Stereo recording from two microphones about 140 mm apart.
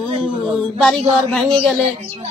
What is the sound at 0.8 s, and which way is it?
Speech, 5° left (ahead or behind).